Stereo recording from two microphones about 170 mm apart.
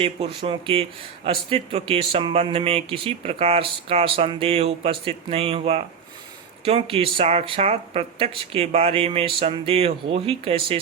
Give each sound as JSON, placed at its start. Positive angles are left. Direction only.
{"t": 0.0, "sound": "speech", "side_deg": -30}